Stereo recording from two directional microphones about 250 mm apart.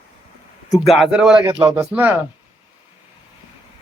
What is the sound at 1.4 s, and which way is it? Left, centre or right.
Female singing, centre.